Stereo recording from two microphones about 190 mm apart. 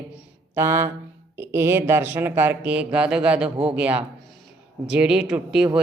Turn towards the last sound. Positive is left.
turn(degrees=-5)  # may be behind; listen again after turning